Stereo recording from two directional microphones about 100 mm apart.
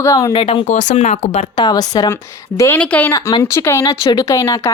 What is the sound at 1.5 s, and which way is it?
Speech, 40° left (ahead or behind).